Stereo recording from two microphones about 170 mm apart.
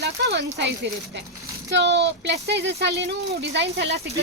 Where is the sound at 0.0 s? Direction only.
85° right.